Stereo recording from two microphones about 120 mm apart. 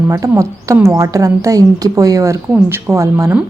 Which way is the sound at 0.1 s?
25° right (ahead or behind).